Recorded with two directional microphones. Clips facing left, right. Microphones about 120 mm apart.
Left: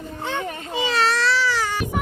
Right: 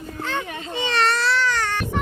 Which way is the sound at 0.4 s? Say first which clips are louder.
Left 2 dB; 45° left (ahead or behind).